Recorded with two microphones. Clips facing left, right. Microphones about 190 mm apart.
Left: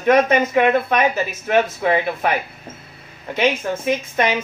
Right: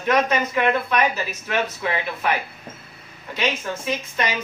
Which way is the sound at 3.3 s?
50° left (ahead or behind).